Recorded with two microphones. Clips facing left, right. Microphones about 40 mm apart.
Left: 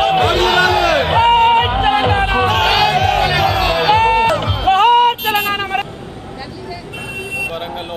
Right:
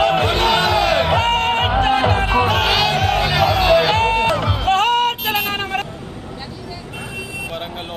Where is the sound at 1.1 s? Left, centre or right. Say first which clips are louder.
Left 7 dB; centre.